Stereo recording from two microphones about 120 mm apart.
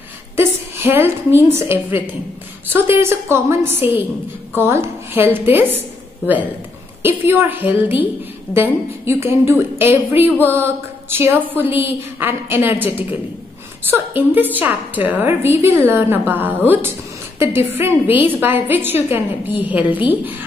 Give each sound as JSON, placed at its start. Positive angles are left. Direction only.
{"t": 0.4, "sound": "a woman's voice", "side_deg": -20}
{"t": 7.0, "sound": "a woman's voice", "side_deg": -20}